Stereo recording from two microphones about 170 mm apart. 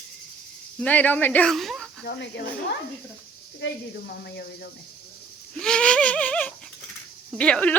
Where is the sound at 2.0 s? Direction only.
80° left.